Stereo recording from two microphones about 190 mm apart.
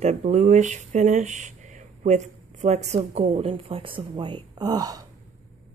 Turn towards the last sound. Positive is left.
turn(degrees=-20)  # may be behind; listen again after turning